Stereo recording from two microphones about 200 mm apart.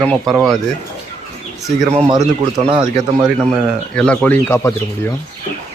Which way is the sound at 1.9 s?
30° right (ahead or behind).